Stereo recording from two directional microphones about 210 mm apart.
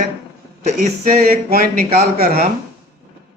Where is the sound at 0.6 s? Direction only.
45° right (ahead or behind).